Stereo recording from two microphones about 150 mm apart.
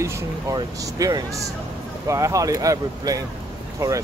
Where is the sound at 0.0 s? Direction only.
20° right (ahead or behind).